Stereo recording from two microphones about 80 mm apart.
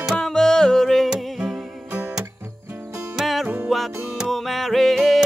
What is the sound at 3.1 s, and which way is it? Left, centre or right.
Music, centre.